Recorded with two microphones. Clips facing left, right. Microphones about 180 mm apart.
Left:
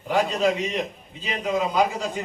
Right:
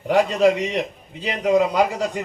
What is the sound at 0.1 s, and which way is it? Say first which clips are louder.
A man's voice: right 5 dB; 70° right (ahead or behind).